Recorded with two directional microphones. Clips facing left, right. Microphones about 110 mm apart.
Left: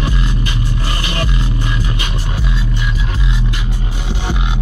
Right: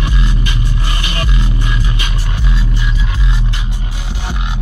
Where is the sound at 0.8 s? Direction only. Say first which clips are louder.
Left 1 dB; 35° left (ahead or behind).